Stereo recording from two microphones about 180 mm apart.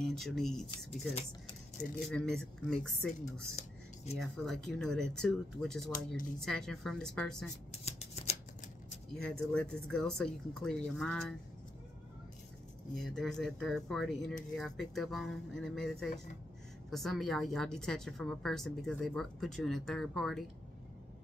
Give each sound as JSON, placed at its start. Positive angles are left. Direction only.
{"t": 0.0, "sound": "a woman's voice", "side_deg": 0}
{"t": 0.7, "sound": "speech", "side_deg": 30}
{"t": 1.8, "sound": "a woman's voice", "side_deg": 5}
{"t": 3.5, "sound": "a sound", "side_deg": 35}
{"t": 4.2, "sound": "a woman's voice", "side_deg": 5}
{"t": 9.1, "sound": "a woman's voice", "side_deg": 5}
{"t": 13.0, "sound": "a woman's voice", "side_deg": 5}